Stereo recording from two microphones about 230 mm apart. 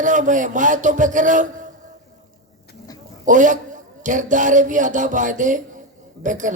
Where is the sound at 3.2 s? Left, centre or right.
Right.